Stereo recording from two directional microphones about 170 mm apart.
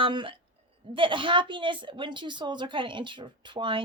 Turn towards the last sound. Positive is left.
turn(degrees=-30)  # may be behind; listen again after turning